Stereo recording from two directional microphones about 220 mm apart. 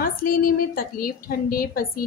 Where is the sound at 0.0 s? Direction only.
40° left (ahead or behind).